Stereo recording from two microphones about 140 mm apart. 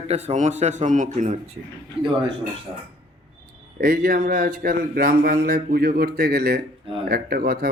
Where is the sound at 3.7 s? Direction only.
90° right.